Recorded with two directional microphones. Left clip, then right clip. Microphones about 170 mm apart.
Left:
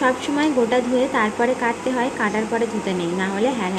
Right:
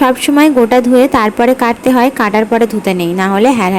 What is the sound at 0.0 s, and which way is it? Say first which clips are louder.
A woman's voice: right 10 dB; 40° right (ahead or behind).